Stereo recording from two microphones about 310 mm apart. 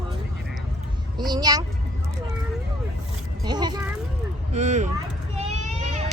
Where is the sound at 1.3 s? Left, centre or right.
Centre.